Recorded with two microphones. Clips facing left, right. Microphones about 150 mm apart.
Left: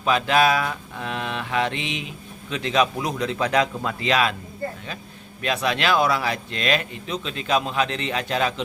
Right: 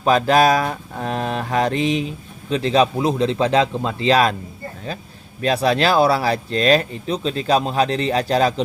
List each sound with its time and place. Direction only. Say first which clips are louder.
0.0 s mantra: right 5 dB; 40° right (ahead or behind)
5.4 s mantra: right 6 dB; 35° right (ahead or behind)